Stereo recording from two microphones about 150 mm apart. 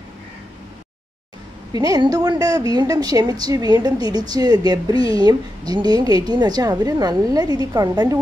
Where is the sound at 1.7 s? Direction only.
25° right (ahead or behind).